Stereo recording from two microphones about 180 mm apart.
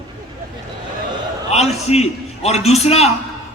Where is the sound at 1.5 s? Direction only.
35° left (ahead or behind).